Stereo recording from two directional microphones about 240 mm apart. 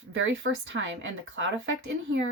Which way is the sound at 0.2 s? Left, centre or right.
Right.